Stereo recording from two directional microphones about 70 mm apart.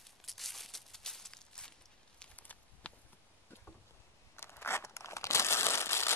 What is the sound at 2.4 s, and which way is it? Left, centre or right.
Walk, left.